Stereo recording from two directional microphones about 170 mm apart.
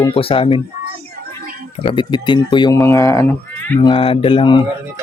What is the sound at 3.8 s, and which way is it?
Speech, 30° left (ahead or behind).